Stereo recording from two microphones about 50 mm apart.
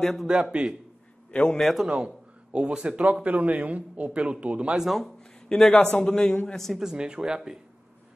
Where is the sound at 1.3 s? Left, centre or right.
Left.